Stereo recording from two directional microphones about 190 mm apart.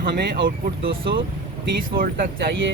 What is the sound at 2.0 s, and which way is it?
Speech, 50° right (ahead or behind).